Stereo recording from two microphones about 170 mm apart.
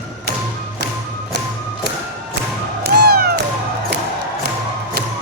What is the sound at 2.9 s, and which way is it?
Cat, 65° right (ahead or behind).